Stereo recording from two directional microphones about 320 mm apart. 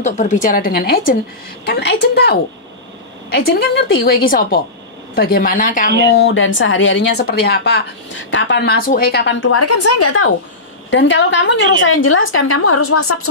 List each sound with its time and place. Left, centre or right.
0.0 s a woman's voice: left
10.9 s a woman's voice: left